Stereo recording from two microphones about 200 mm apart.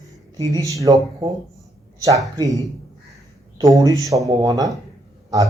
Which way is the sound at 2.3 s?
20° right (ahead or behind).